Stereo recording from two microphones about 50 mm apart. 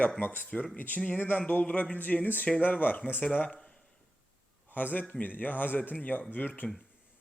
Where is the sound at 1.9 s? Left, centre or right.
Left.